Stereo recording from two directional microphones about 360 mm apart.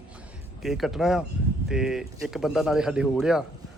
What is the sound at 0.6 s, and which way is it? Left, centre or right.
A man's voice, centre.